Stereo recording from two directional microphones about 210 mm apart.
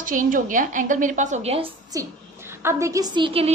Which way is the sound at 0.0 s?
40° right (ahead or behind).